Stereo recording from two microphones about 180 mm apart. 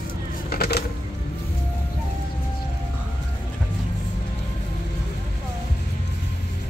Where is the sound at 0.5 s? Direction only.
60° left (ahead or behind).